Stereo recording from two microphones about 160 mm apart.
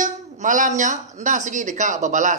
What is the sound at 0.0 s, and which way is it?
A man's voice, 55° right (ahead or behind).